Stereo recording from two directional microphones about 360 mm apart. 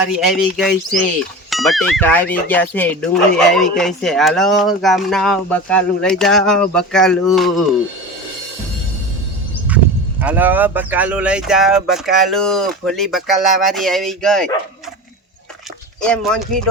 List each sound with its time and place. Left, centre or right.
0.1 s speech: centre
9.6 s speech: centre
16.0 s speech: centre